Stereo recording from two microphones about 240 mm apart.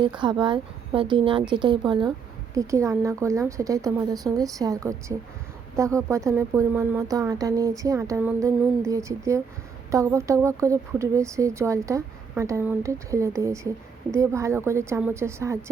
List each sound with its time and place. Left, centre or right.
0.0 s a woman's voice: centre